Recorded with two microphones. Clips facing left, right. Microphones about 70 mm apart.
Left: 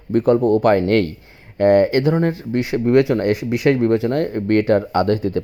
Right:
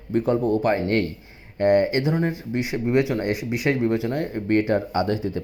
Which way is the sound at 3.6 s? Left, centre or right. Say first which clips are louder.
Left 6 dB; left.